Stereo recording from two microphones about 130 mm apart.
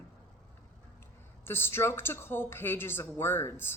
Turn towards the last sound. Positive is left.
turn(degrees=15)  # may be behind; listen again after turning